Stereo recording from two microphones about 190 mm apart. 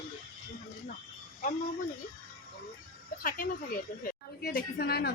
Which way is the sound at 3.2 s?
50° left (ahead or behind).